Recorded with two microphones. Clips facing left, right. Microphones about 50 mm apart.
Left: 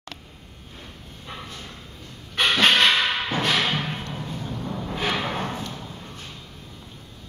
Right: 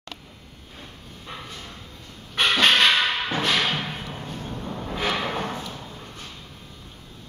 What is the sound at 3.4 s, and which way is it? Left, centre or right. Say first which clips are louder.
Music: even; centre.